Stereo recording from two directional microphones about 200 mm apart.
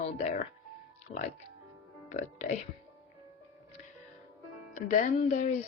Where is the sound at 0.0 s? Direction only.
35° left (ahead or behind).